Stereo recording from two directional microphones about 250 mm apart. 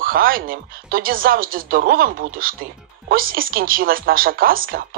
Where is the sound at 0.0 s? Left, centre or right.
Right.